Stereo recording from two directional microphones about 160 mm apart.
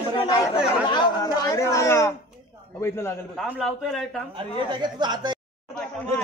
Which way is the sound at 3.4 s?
Centre (ahead or behind).